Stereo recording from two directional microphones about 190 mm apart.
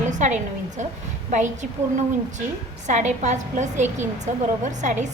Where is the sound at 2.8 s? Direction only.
40° right (ahead or behind).